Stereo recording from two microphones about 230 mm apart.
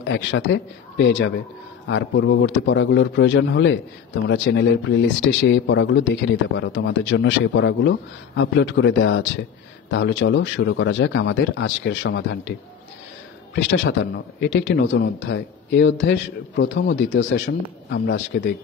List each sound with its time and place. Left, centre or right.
0.0 s speech: left
13.6 s speech: left